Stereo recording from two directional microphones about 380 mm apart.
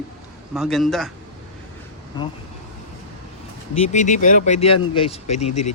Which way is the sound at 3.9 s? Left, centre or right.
Centre.